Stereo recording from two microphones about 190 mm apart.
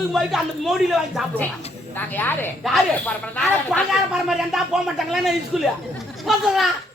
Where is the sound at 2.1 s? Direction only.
10° left (ahead or behind).